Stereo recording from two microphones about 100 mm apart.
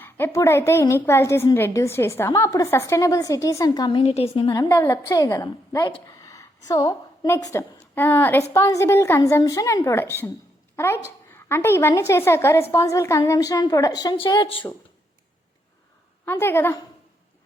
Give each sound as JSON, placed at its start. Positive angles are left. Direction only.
{"t": 0.0, "sound": "a woman's voice", "side_deg": 25}
{"t": 3.9, "sound": "a woman's voice", "side_deg": 85}
{"t": 4.7, "sound": "a woman's voice", "side_deg": 25}
{"t": 6.1, "sound": "a sound", "side_deg": 35}
{"t": 7.3, "sound": "a woman's voice", "side_deg": 30}
{"t": 7.9, "sound": "a woman's voice", "side_deg": 20}
{"t": 9.4, "sound": "a woman's voice", "side_deg": 35}
{"t": 14.3, "sound": "a woman's voice", "side_deg": 55}
{"t": 16.2, "sound": "a woman's voice", "side_deg": 25}